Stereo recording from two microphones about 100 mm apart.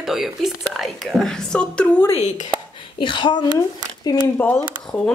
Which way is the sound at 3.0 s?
55° left (ahead or behind).